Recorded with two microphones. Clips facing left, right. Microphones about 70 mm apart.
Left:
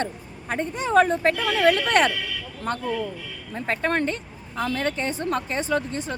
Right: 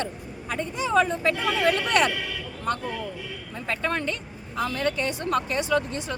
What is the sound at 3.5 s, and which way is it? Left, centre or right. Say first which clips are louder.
Speech: left 4 dB; left.